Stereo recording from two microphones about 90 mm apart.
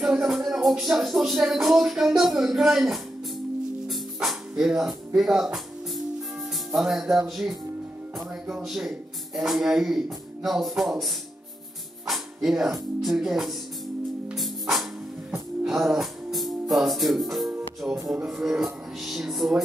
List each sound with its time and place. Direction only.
0.0 s music: 5° right (ahead or behind)
6.7 s music: 5° right (ahead or behind)
8.5 s speech: 5° right (ahead or behind)
10.8 s music: centre (ahead or behind)
17.8 s music: 15° right (ahead or behind)
18.2 s music: 5° right (ahead or behind)